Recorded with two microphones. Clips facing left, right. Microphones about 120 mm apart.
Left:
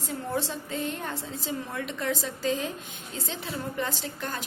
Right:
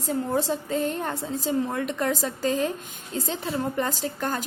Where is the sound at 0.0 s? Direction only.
40° right (ahead or behind).